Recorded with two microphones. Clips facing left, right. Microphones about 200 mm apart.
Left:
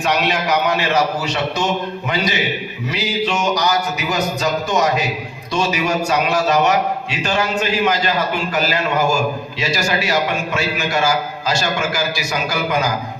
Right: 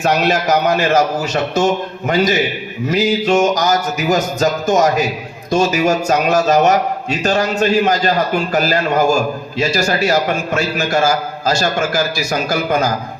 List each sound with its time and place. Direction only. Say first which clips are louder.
0.0 s a man's voice: right 4 dB; 45° right (ahead or behind)